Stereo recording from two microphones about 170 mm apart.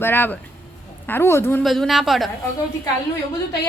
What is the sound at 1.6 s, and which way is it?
Speech, centre (ahead or behind).